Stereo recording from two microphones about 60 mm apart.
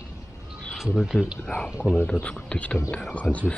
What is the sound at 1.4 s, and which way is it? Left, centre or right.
Speech, centre.